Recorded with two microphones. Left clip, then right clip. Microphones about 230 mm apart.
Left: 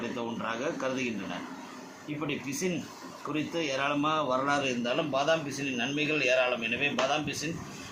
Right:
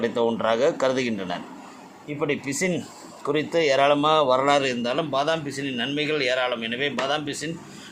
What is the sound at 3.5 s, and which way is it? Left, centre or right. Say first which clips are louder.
A man's voice: right 12 dB; right.